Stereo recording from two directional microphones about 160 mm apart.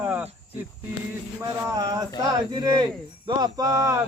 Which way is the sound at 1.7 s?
25° right (ahead or behind).